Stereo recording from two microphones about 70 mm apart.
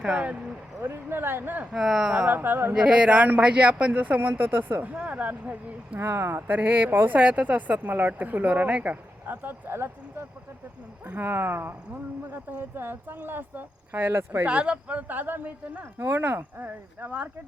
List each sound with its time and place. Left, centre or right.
0.0 s speech: centre
0.8 s speech: right
1.7 s speech: centre
2.2 s speech: right
2.7 s speech: centre
6.0 s speech: right
6.6 s speech: right
11.0 s speech: right